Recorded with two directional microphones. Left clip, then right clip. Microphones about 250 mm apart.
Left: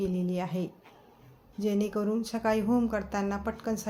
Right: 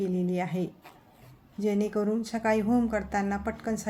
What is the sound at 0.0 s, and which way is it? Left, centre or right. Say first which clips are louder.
A woman's voice: right 2 dB; centre.